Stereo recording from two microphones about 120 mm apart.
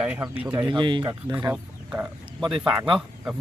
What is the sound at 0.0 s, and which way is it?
Speech, 10° right (ahead or behind).